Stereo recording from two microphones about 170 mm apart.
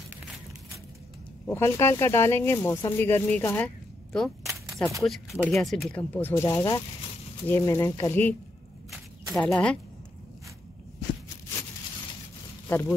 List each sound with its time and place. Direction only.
1.5 s speech: 15° left (ahead or behind)
12.6 s speech: 10° left (ahead or behind)